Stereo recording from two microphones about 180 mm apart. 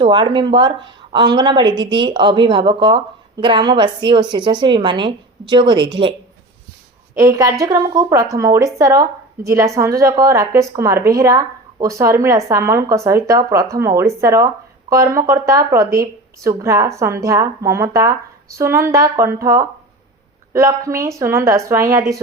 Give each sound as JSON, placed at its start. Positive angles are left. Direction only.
{"t": 0.0, "sound": "a woman's voice", "side_deg": -25}